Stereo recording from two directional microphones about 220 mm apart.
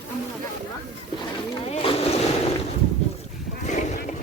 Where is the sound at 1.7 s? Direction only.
25° left (ahead or behind).